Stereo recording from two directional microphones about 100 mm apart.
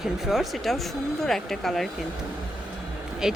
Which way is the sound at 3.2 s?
5° right (ahead or behind).